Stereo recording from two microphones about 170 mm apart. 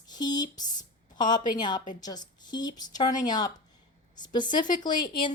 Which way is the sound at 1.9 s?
25° left (ahead or behind).